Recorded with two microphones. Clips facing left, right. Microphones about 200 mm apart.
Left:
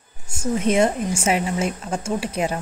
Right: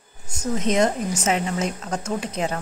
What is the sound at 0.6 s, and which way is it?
A woman's voice, 10° left (ahead or behind).